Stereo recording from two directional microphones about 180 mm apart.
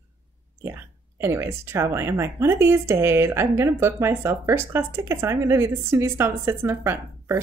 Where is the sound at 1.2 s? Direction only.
15° right (ahead or behind).